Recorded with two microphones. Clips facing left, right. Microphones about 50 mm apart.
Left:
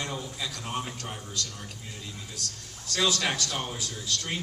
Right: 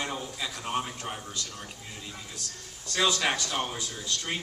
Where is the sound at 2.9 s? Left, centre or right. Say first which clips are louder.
Right 1 dB; centre.